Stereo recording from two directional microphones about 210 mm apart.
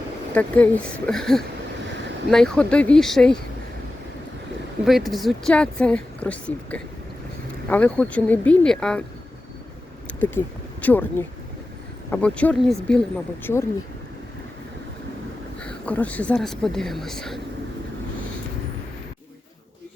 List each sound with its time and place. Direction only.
0.3 s speech: 5° left (ahead or behind)
4.9 s speech: centre (ahead or behind)
10.2 s speech: 10° left (ahead or behind)
15.6 s speech: 5° left (ahead or behind)